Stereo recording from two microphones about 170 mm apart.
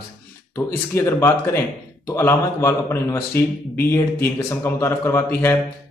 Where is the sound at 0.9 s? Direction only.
15° left (ahead or behind).